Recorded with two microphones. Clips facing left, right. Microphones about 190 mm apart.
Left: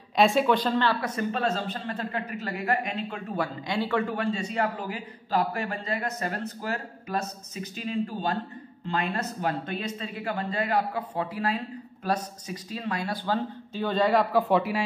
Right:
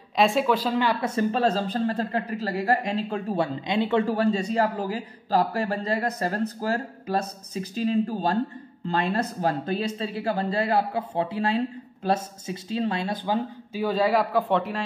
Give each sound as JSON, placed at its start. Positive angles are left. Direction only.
{"t": 0.1, "sound": "speech", "side_deg": 0}
{"t": 1.0, "sound": "speech", "side_deg": -30}